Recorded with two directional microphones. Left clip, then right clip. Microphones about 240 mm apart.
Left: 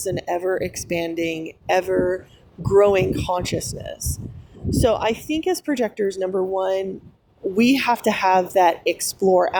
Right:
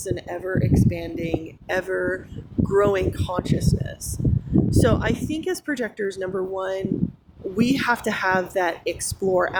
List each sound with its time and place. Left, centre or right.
0.0 s speech: left